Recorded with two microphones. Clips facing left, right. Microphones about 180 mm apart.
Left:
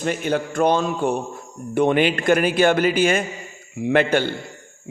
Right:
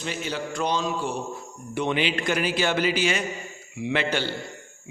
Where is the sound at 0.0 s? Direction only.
55° left (ahead or behind).